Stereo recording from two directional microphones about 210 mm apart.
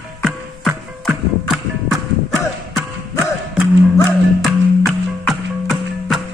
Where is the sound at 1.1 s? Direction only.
Centre (ahead or behind).